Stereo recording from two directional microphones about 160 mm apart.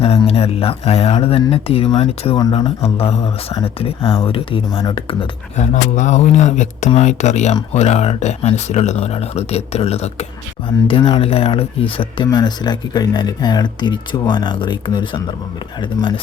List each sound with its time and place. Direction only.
0.0 s speech: 40° left (ahead or behind)
5.5 s speech: 50° left (ahead or behind); by 16.2 s 30° left (ahead or behind)